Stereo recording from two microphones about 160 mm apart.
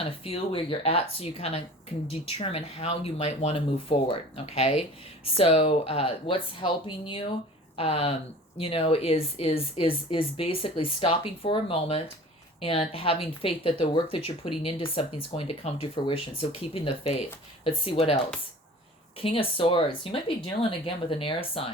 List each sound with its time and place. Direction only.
0.0 s a woman's voice: 35° left (ahead or behind)
19.2 s a woman's voice: 35° left (ahead or behind)